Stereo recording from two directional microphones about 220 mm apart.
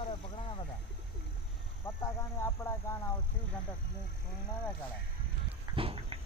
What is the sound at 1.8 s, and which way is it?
Speech, 15° left (ahead or behind).